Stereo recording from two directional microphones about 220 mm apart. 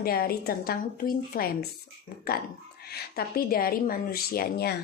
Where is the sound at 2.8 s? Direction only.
45° left (ahead or behind).